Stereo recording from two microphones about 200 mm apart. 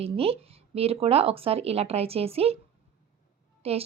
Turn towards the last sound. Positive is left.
turn(degrees=-30)  # may be behind; listen again after turning